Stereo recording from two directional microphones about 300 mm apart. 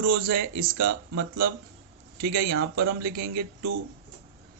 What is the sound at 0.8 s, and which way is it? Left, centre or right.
Speech, right.